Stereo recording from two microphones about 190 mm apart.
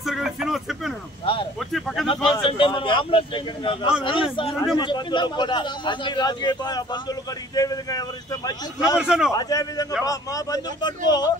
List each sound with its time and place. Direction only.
0.0 s a sound: centre (ahead or behind)
1.2 s a sound: 30° left (ahead or behind)
1.7 s speech: centre (ahead or behind)
2.4 s a man's voice: 25° left (ahead or behind)
8.9 s a man's voice: 5° right (ahead or behind)
9.3 s a man's voice: 20° left (ahead or behind)